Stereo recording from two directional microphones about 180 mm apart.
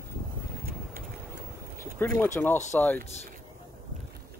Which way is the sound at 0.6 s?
55° right (ahead or behind).